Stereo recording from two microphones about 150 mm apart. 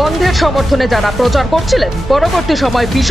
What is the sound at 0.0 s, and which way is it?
Speech, centre (ahead or behind).